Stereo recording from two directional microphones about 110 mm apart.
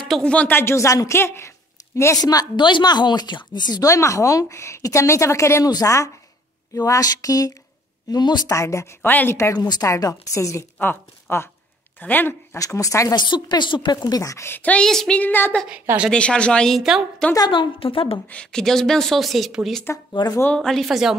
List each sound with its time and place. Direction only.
0.2 s a woman's voice: 10° left (ahead or behind)
2.1 s a woman's voice: 35° left (ahead or behind); by 12.4 s 15° left (ahead or behind)
12.5 s a woman's voice: 30° left (ahead or behind)
13.1 s a woman's voice: 45° left (ahead or behind)
14.0 s a woman's voice: 35° left (ahead or behind); by 15.5 s 15° left (ahead or behind)
15.7 s a woman's voice: 10° right (ahead or behind)
16.1 s a woman's voice: 10° left (ahead or behind)
17.5 s a woman's voice: 50° left (ahead or behind)
18.3 s a woman's voice: 5° left (ahead or behind)
19.8 s a woman's voice: 25° left (ahead or behind)
20.5 s a woman's voice: 5° left (ahead or behind)